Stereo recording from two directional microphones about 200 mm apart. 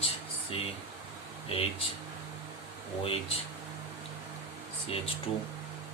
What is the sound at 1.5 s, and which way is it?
Speech, 30° left (ahead or behind).